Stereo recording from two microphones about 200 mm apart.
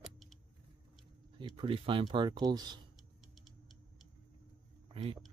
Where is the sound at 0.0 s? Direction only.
Centre (ahead or behind).